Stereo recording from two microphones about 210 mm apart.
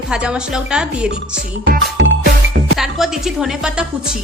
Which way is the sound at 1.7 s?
60° right (ahead or behind).